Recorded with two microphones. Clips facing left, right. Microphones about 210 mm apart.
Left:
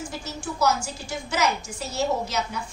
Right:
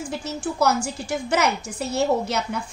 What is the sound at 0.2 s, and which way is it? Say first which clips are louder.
A woman's voice: right 2 dB; 55° right (ahead or behind).